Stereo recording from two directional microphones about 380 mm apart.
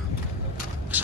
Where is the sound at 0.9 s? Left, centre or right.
Centre.